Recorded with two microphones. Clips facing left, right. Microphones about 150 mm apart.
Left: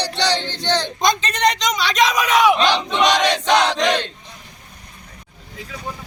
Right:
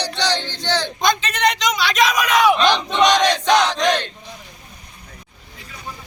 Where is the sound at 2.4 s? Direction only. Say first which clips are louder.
Right 1 dB; 15° left (ahead or behind).